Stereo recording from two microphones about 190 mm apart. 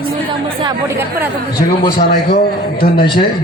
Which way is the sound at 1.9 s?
50° left (ahead or behind).